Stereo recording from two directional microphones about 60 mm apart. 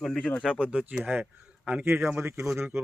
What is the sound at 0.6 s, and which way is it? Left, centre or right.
Speech, right.